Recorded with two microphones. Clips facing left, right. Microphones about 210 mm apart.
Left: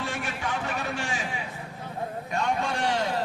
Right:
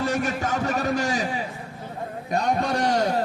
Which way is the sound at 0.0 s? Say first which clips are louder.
Right 8 dB; 40° right (ahead or behind).